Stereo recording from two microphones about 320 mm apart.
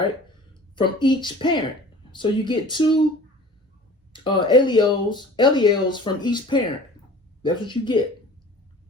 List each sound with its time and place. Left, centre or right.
0.8 s speech: centre
4.1 s speech: centre